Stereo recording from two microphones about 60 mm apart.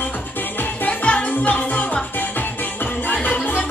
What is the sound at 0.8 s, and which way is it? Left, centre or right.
Music, left.